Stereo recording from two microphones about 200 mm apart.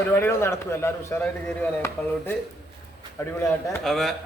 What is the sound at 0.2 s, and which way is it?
Speech, 10° left (ahead or behind).